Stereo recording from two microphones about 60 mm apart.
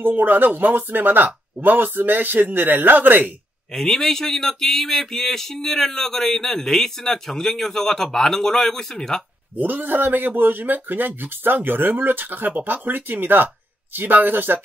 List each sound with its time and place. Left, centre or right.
0.0 s speech: right
3.7 s a sound: centre
9.6 s speech: right